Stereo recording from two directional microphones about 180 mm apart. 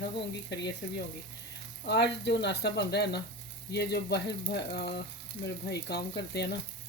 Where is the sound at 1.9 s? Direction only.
70° left (ahead or behind).